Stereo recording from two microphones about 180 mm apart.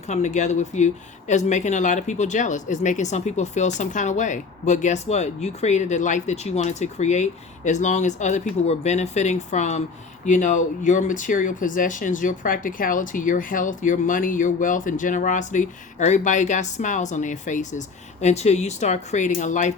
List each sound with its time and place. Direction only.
0.1 s speech: 40° left (ahead or behind)